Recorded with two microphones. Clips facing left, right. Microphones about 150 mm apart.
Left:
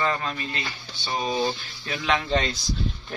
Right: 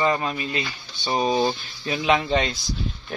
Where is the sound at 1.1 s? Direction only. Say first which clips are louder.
Right 4 dB; 25° right (ahead or behind).